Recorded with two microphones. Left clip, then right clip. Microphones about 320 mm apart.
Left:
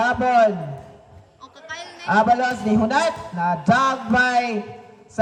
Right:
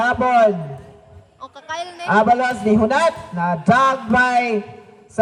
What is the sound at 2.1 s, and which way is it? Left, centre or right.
A man's voice, centre.